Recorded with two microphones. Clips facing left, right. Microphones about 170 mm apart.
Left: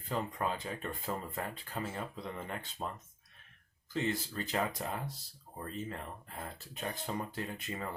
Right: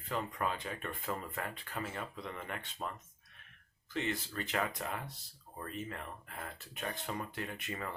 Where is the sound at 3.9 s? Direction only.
35° left (ahead or behind).